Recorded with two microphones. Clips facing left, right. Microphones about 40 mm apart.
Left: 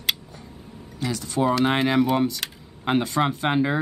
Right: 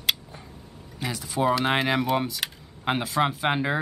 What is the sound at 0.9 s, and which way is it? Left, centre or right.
Speech, centre.